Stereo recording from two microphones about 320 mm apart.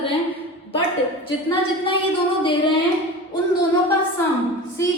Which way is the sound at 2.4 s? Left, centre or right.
Centre.